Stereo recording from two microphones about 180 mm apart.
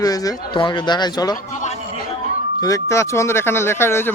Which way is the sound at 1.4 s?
40° left (ahead or behind).